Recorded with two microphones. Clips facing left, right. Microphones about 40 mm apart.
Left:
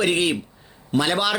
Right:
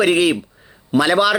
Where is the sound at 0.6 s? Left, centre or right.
Right.